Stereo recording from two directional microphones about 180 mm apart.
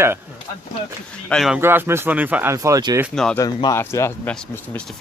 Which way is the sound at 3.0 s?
5° left (ahead or behind).